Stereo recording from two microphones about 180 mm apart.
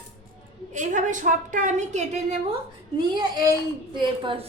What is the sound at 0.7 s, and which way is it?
A woman's voice, 45° right (ahead or behind).